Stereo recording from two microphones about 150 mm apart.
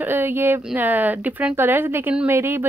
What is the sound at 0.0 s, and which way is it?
Speech, 15° right (ahead or behind).